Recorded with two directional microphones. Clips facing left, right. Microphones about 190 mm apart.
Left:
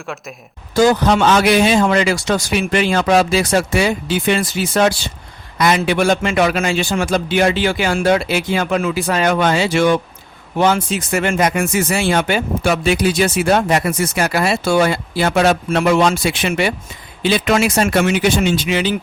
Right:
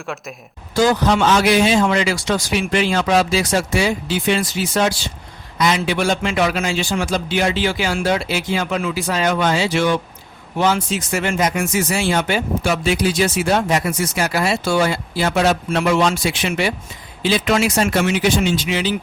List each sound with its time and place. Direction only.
0.8 s speech: 50° left (ahead or behind)